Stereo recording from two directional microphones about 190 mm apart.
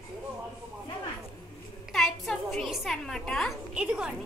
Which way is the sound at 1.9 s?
Centre (ahead or behind).